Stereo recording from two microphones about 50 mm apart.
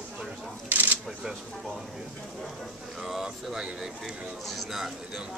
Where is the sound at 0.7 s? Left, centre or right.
Right.